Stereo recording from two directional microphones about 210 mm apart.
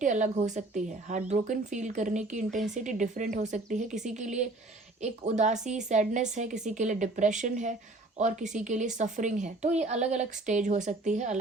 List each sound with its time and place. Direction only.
0.0 s a woman's voice: 35° right (ahead or behind)